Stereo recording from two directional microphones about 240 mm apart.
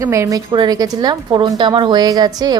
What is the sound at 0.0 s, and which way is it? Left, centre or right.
A woman's voice, centre.